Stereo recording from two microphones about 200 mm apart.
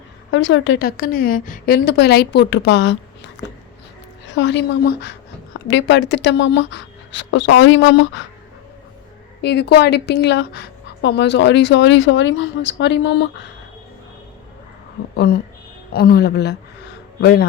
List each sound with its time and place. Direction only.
0.3 s a woman's voice: 70° left (ahead or behind)
4.3 s a woman's voice: 60° left (ahead or behind)
5.6 s a woman's voice: 65° left (ahead or behind)
9.4 s a woman's voice: 55° left (ahead or behind)
15.1 s a woman's voice: 50° left (ahead or behind)